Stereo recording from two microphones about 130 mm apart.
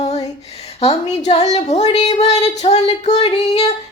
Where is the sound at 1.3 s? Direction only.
55° left (ahead or behind).